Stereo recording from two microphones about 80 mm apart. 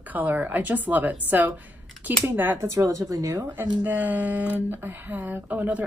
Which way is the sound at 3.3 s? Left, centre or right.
Right.